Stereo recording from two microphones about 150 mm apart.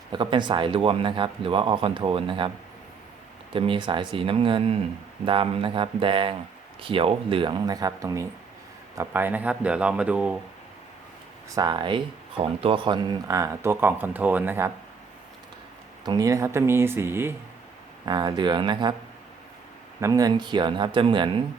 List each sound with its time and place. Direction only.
0.1 s speech: 30° right (ahead or behind)
3.5 s speech: 35° right (ahead or behind); by 10.3 s 10° right (ahead or behind)
11.5 s speech: 30° right (ahead or behind)
16.0 s speech: 25° right (ahead or behind)
18.0 s speech: 30° right (ahead or behind)
20.0 s speech: 20° right (ahead or behind)